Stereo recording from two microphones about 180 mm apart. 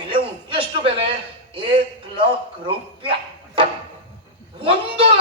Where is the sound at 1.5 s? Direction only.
30° right (ahead or behind).